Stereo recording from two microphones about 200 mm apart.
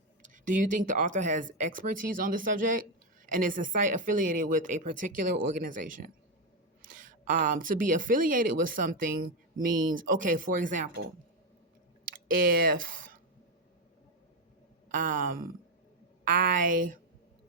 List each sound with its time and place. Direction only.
0.2 s speech: 40° right (ahead or behind)
12.6 s speech: 45° right (ahead or behind)
14.8 s a sound: 40° right (ahead or behind)
16.2 s speech: 40° right (ahead or behind)